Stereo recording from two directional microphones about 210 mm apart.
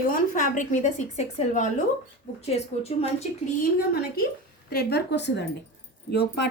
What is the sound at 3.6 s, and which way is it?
Speech, 45° left (ahead or behind).